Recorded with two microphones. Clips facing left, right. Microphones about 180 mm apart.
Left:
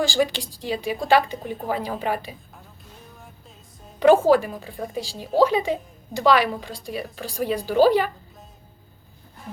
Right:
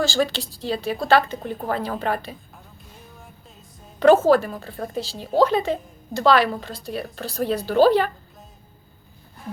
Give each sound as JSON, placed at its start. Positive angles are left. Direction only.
{"t": 0.0, "sound": "speech", "side_deg": 15}
{"t": 1.4, "sound": "a woman's voice", "side_deg": 0}
{"t": 1.6, "sound": "speech", "side_deg": 15}
{"t": 4.0, "sound": "speech", "side_deg": 15}